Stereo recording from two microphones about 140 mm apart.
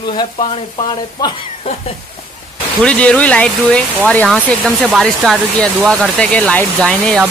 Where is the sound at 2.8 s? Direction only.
5° left (ahead or behind).